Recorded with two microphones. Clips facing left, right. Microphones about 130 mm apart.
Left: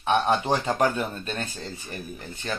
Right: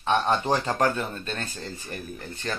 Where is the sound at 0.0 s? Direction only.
15° left (ahead or behind).